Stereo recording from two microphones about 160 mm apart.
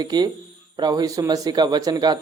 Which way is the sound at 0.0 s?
25° right (ahead or behind).